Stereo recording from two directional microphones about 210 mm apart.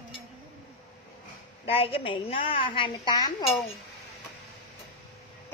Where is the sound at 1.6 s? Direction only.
25° left (ahead or behind).